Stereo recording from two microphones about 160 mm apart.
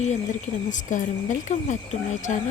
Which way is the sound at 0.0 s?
45° left (ahead or behind).